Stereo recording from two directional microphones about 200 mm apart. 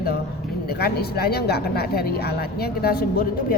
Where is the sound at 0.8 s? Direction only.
50° left (ahead or behind).